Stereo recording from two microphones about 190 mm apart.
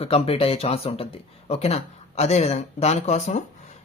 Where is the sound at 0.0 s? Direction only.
30° left (ahead or behind).